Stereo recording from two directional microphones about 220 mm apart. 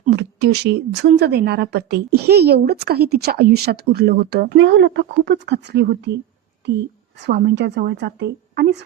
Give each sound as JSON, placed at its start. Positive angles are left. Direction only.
{"t": 0.1, "sound": "a woman's voice", "side_deg": -50}
{"t": 7.2, "sound": "a woman's voice", "side_deg": -50}